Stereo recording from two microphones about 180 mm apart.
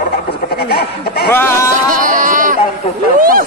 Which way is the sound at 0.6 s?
60° left (ahead or behind).